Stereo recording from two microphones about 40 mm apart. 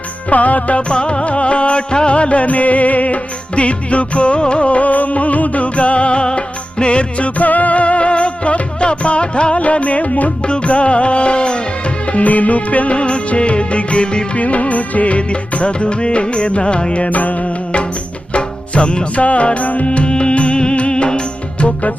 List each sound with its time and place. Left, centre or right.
0.3 s music: left
7.3 s music: left
12.1 s music: left
14.3 s music: left